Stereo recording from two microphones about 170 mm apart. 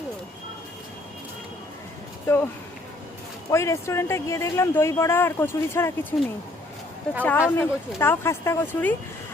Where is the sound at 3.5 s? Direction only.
15° left (ahead or behind).